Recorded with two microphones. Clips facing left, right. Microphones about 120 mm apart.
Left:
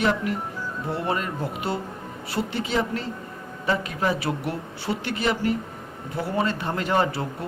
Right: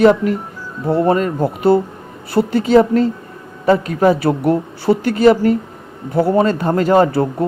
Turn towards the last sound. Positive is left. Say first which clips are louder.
# right 11 dB
turn(degrees=-40)  # may be behind; listen again after turning